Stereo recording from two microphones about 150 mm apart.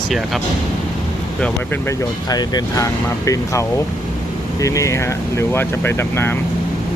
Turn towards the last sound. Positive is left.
turn(degrees=15)  # may be behind; listen again after turning